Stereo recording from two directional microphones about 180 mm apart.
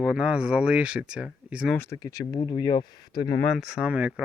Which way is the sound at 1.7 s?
15° left (ahead or behind).